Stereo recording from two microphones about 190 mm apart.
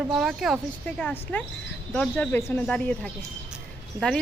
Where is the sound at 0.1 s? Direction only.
Centre (ahead or behind).